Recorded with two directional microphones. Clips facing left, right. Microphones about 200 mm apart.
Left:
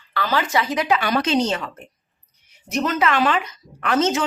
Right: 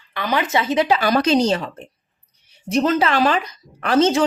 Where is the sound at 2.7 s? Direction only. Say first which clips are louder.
Right 3 dB; 30° right (ahead or behind).